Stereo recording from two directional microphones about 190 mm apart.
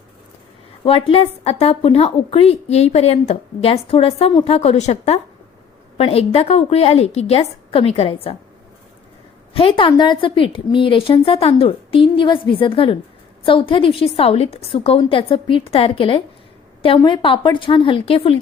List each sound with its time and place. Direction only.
0.9 s a woman's voice: 30° left (ahead or behind)
9.5 s a woman's voice: 30° left (ahead or behind)